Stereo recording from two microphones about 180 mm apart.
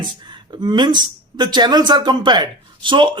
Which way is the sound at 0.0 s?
25° right (ahead or behind).